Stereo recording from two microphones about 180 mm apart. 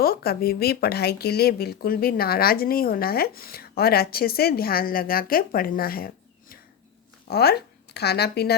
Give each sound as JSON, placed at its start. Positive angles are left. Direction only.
{"t": 0.0, "sound": "speech", "side_deg": 55}
{"t": 7.3, "sound": "a woman's voice", "side_deg": 60}